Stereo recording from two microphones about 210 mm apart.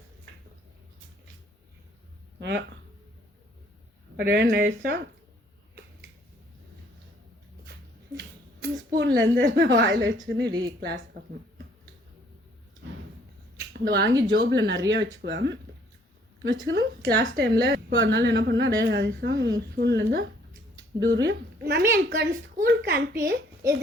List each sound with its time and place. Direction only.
2.4 s speech: 55° right (ahead or behind)
4.2 s a woman's voice: 50° right (ahead or behind)
9.0 s a woman's voice: 55° right (ahead or behind)
13.8 s a woman's voice: 55° right (ahead or behind)